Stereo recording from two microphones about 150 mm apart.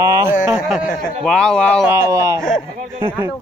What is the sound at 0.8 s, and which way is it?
Speech, 65° left (ahead or behind).